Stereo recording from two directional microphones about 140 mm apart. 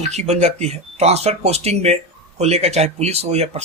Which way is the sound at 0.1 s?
50° right (ahead or behind).